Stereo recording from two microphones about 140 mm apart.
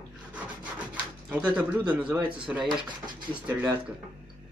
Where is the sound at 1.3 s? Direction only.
5° right (ahead or behind).